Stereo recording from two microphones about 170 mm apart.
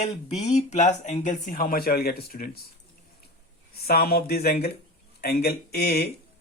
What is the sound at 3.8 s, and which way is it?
Speech, 65° left (ahead or behind).